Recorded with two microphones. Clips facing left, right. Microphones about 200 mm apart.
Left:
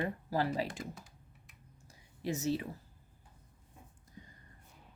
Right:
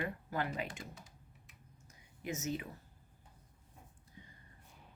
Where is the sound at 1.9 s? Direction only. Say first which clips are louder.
Left 5 dB; 35° left (ahead or behind).